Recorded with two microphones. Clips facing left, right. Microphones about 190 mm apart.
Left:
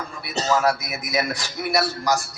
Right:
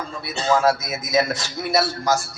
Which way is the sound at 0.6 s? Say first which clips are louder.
Right 2 dB; 20° right (ahead or behind).